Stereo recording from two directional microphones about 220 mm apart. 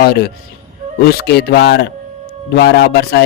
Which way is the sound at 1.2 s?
45° left (ahead or behind).